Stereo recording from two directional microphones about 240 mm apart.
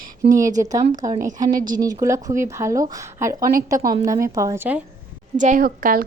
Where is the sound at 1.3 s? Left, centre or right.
Centre.